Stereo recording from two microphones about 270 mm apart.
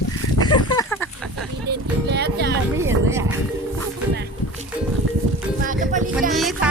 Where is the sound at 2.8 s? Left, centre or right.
Centre.